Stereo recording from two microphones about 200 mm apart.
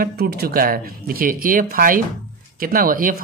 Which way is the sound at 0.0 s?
50° right (ahead or behind).